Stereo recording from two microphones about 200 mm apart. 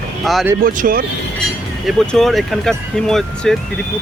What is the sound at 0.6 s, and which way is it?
Speech, 45° right (ahead or behind).